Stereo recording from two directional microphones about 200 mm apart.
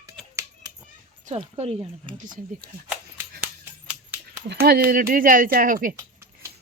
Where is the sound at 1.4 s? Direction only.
30° right (ahead or behind).